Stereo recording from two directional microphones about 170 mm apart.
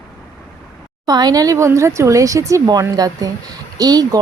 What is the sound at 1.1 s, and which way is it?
Speech, 25° right (ahead or behind).